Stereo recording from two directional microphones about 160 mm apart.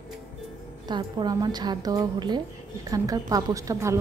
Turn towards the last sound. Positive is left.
turn(degrees=-20)  # may be behind; listen again after turning